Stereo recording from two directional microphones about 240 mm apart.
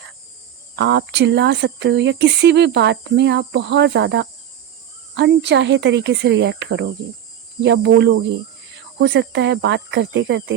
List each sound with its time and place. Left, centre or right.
0.8 s speech: right